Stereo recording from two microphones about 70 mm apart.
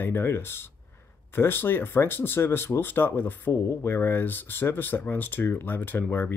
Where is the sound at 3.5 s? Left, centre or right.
Left.